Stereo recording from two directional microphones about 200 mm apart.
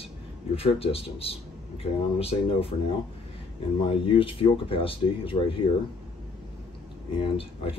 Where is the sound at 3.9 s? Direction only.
25° left (ahead or behind).